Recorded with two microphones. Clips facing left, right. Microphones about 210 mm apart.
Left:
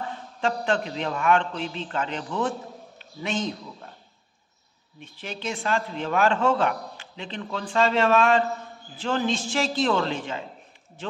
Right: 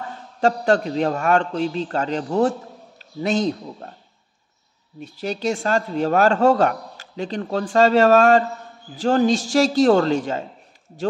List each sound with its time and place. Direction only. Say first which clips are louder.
0.4 s a man's voice: right 7 dB; 40° right (ahead or behind)
5.0 s speech: right 9 dB; 40° right (ahead or behind)